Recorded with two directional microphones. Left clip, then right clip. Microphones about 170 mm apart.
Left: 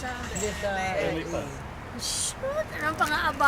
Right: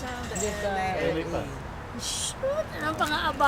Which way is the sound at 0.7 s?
45° right (ahead or behind).